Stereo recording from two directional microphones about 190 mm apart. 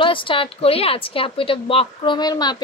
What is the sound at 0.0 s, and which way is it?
Speech, 25° left (ahead or behind).